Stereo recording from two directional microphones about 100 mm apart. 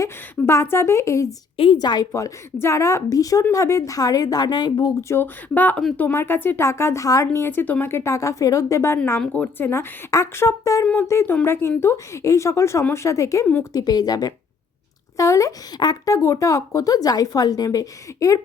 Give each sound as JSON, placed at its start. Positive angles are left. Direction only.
{"t": 0.0, "sound": "speech", "side_deg": 25}
{"t": 1.5, "sound": "a woman's voice", "side_deg": 65}
{"t": 1.8, "sound": "speech", "side_deg": 40}
{"t": 4.9, "sound": "speech", "side_deg": 25}
{"t": 7.3, "sound": "speech", "side_deg": 20}
{"t": 9.2, "sound": "speech", "side_deg": 15}